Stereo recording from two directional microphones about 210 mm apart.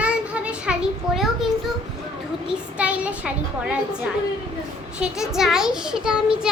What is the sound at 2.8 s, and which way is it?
Speech, 5° right (ahead or behind).